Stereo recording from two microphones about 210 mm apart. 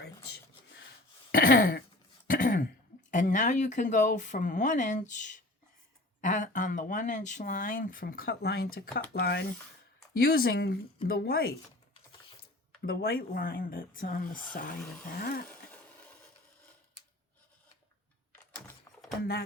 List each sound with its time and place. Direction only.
1.3 s speech: 45° left (ahead or behind)
2.2 s throat clearing: 40° left (ahead or behind)
3.1 s speech: 35° left (ahead or behind)
12.8 s speech: 45° left (ahead or behind)
15.4 s a sound: 10° left (ahead or behind)
18.9 s a sound: 15° left (ahead or behind)